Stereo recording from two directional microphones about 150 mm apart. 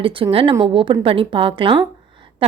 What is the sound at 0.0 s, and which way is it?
A woman's voice, 35° right (ahead or behind).